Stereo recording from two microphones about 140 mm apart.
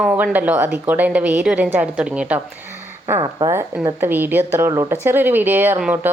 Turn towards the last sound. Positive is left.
turn(degrees=-15)  # may be behind; listen again after turning